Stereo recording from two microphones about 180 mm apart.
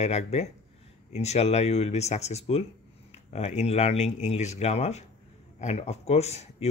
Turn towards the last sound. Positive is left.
turn(degrees=35)  # may be behind; listen again after turning